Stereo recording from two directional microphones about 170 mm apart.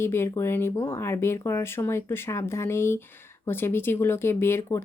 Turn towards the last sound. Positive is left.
turn(degrees=15)  # may be behind; listen again after turning